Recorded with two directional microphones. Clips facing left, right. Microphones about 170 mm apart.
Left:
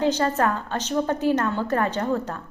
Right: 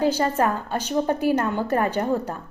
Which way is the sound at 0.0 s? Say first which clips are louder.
Right 1 dB; 10° right (ahead or behind).